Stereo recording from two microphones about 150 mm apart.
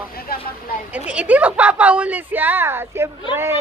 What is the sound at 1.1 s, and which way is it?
A woman's voice, 10° right (ahead or behind).